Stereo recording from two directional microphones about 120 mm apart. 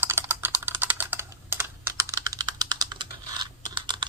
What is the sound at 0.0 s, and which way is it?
Typing, 20° right (ahead or behind).